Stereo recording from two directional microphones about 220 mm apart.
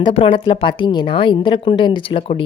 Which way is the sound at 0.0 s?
25° left (ahead or behind).